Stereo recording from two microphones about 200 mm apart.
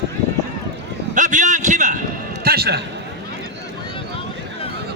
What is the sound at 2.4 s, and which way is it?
Basketball bounce, 50° right (ahead or behind).